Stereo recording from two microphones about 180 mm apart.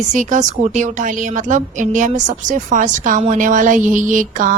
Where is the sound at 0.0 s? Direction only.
45° right (ahead or behind).